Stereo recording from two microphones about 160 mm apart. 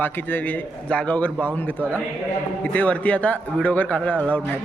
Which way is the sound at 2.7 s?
10° left (ahead or behind).